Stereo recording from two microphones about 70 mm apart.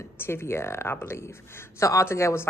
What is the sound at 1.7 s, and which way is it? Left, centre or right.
Speech, left.